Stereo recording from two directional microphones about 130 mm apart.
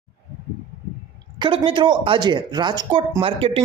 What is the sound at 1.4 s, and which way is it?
A man's voice, 45° right (ahead or behind).